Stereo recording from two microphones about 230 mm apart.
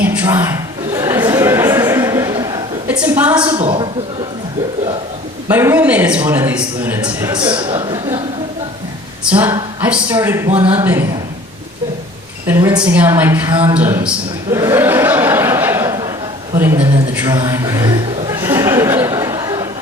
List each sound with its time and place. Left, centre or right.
0.0 s a sound: centre
2.9 s a woman's voice: centre
3.3 s a woman's voice: centre
5.5 s a man's voice: centre
9.4 s a man's voice: centre
12.5 s a man's voice: centre
14.5 s a sound: centre